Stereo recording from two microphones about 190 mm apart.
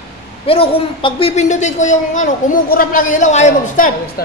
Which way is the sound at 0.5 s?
30° left (ahead or behind).